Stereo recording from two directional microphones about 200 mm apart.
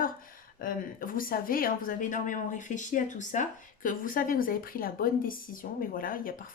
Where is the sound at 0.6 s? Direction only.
45° left (ahead or behind).